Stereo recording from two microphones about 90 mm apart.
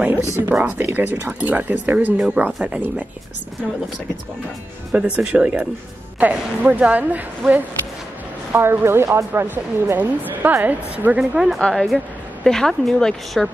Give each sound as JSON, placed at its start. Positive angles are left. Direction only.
{"t": 0.6, "sound": "speech", "side_deg": -15}
{"t": 4.9, "sound": "speech", "side_deg": -10}
{"t": 11.3, "sound": "speech", "side_deg": -5}